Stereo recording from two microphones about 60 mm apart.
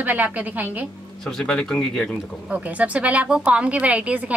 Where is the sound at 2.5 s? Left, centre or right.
Right.